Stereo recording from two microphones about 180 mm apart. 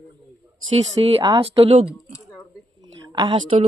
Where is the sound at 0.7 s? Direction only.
30° right (ahead or behind).